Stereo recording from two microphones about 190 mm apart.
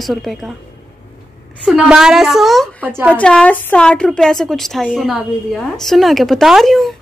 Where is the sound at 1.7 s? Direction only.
5° right (ahead or behind).